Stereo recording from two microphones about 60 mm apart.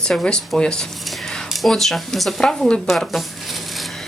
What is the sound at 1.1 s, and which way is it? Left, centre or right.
Speech, centre.